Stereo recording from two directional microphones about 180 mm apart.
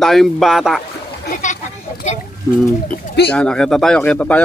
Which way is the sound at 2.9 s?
65° left (ahead or behind).